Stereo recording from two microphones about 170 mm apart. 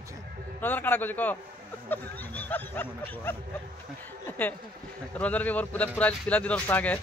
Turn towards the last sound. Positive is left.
turn(degrees=10)  # may be behind; listen again after turning